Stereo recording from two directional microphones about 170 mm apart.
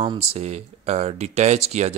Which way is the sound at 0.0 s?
35° right (ahead or behind).